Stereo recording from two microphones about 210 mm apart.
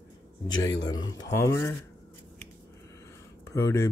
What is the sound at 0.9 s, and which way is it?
Speech, 20° left (ahead or behind).